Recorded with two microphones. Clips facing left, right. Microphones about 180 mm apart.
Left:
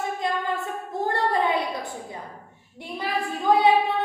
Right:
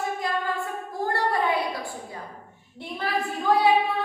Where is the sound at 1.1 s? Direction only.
20° left (ahead or behind).